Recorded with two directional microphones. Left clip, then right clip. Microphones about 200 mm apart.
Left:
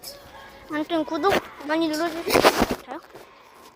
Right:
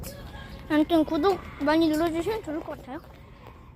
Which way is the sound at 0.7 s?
15° right (ahead or behind).